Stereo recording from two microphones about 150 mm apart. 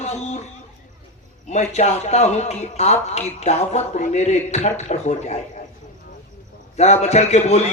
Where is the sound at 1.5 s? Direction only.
50° left (ahead or behind).